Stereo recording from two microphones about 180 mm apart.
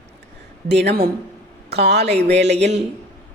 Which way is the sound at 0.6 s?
70° right (ahead or behind).